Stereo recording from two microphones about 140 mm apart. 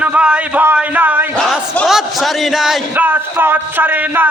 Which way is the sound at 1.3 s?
5° left (ahead or behind).